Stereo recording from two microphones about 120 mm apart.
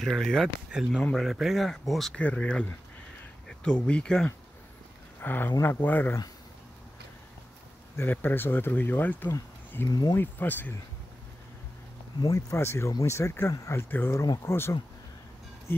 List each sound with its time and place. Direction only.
0.0 s speech: 5° left (ahead or behind)
5.2 s speech: 15° left (ahead or behind)
7.9 s speech: 20° left (ahead or behind)
9.8 s speech: 30° left (ahead or behind)
10.1 s speech: 15° left (ahead or behind)
12.2 s speech: 30° left (ahead or behind)